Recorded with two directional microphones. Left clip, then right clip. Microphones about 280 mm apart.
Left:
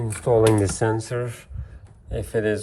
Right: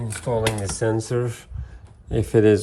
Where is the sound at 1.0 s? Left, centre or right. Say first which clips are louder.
Right 3 dB; centre.